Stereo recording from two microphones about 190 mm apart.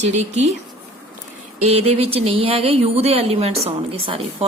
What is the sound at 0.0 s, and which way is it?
Speech, 35° right (ahead or behind).